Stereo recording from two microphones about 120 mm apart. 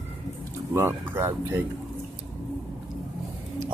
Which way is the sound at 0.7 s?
20° right (ahead or behind).